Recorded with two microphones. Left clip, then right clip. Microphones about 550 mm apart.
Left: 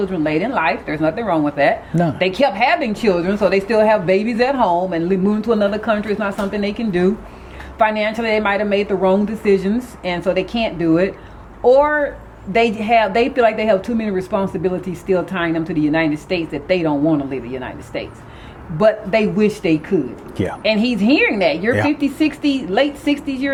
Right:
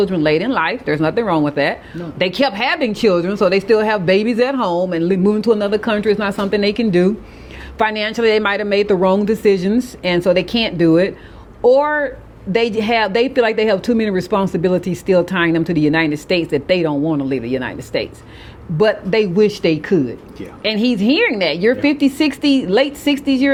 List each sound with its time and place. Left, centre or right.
0.0 s a woman's voice: right